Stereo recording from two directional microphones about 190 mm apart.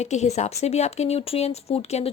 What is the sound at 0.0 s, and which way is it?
A woman's voice, 35° left (ahead or behind).